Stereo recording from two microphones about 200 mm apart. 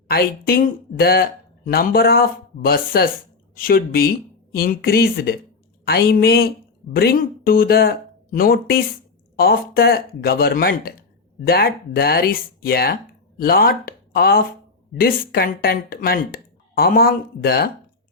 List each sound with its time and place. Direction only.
0.1 s speech: 50° left (ahead or behind)